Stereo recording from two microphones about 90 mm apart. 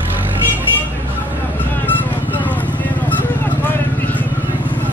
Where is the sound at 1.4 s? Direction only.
20° left (ahead or behind).